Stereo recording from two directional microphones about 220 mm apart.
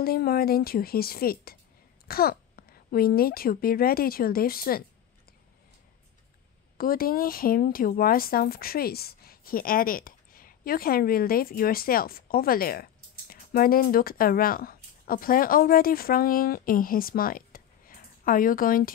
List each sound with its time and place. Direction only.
0.0 s a child's voice: 45° left (ahead or behind)
6.8 s speech: 40° left (ahead or behind)